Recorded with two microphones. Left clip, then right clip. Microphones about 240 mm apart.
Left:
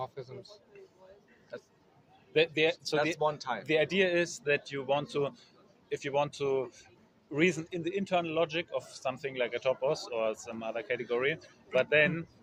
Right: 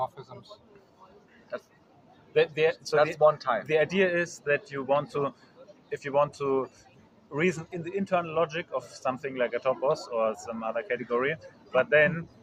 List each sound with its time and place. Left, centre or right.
0.0 s a man's voice: left
1.5 s speech: centre
2.3 s a man's voice: left
3.0 s speech: centre
3.7 s a man's voice: left